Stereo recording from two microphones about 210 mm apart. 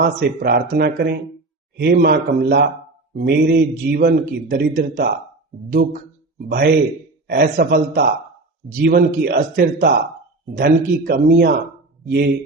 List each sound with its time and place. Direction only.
0.0 s a man's voice: 45° right (ahead or behind)
7.3 s a man's voice: 50° right (ahead or behind)